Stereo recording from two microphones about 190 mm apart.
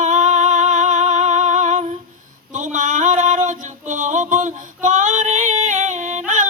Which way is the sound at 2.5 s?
40° right (ahead or behind).